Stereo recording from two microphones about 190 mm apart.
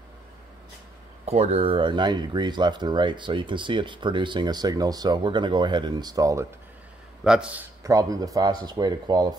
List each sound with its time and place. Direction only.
1.2 s speech: 35° right (ahead or behind); by 6.4 s 20° right (ahead or behind)
7.2 s a man's voice: 5° right (ahead or behind)
7.8 s speech: 20° right (ahead or behind)